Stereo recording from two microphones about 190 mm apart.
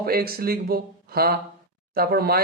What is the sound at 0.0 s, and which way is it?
Speech, 55° right (ahead or behind).